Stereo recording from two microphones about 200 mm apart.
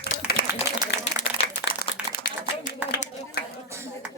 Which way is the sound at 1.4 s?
30° left (ahead or behind).